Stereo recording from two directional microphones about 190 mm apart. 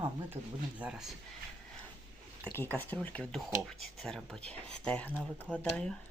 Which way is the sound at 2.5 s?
10° left (ahead or behind).